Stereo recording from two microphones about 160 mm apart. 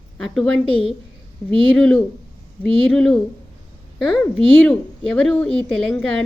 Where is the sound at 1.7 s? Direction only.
5° left (ahead or behind).